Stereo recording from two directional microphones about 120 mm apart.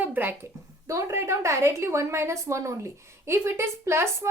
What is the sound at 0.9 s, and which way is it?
A woman's voice, 25° right (ahead or behind).